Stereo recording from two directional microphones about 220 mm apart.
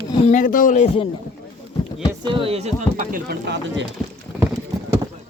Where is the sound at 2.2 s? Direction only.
25° right (ahead or behind); by 3.8 s 50° right (ahead or behind).